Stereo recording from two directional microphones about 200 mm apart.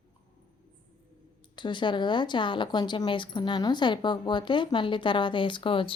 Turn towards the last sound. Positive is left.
turn(degrees=25)  # may be behind; listen again after turning